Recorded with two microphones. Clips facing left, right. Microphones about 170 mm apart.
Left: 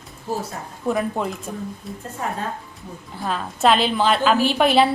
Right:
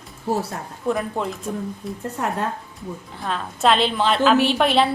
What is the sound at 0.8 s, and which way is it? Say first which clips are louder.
Speech: left 1 dB; 5° left (ahead or behind).